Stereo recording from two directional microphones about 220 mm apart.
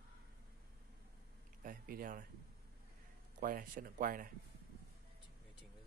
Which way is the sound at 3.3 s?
40° right (ahead or behind).